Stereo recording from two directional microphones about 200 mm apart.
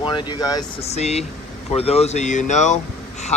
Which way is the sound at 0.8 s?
35° left (ahead or behind).